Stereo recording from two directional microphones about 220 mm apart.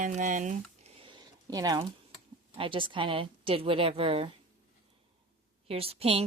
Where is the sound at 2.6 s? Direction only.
25° right (ahead or behind).